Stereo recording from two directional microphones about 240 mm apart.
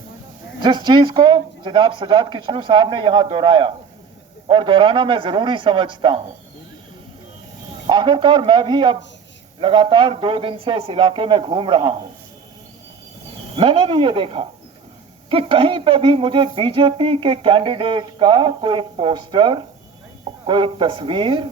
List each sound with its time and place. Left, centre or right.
0.6 s speech: centre
7.9 s speech: centre
13.6 s speech: right